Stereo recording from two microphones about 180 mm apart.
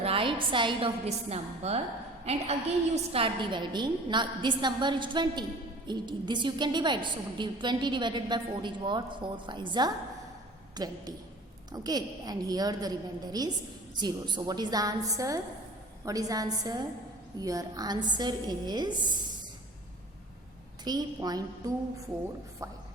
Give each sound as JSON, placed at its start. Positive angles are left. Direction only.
{"t": 0.0, "sound": "a woman's voice", "side_deg": -30}
{"t": 20.8, "sound": "a woman's voice", "side_deg": -20}